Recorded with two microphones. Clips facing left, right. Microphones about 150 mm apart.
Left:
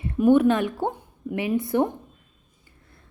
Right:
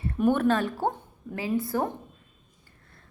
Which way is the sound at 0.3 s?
15° left (ahead or behind).